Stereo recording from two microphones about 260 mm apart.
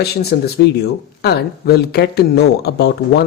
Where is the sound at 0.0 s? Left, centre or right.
Left.